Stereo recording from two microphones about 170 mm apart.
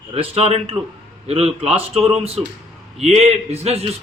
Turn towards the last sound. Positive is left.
turn(degrees=-35)  # may be behind; listen again after turning